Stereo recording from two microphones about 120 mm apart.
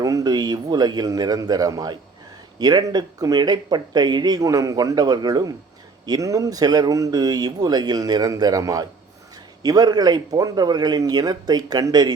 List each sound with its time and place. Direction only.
0.0 s speech: 30° right (ahead or behind)